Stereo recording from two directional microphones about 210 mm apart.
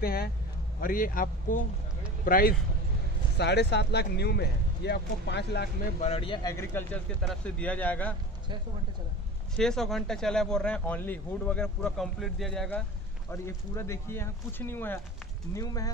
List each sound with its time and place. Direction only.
0.0 s a man's voice: 45° left (ahead or behind)
5.9 s a man's voice: 30° left (ahead or behind); by 8.2 s 5° left (ahead or behind)
9.6 s a man's voice: centre (ahead or behind)